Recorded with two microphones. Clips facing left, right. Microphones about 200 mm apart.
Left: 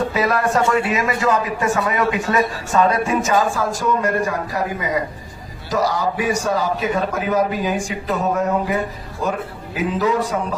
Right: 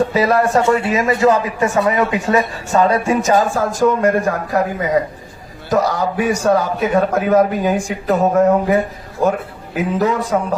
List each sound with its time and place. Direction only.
0.1 s a man's voice: 30° right (ahead or behind); by 8.8 s 50° right (ahead or behind)
10.0 s speech: 50° right (ahead or behind)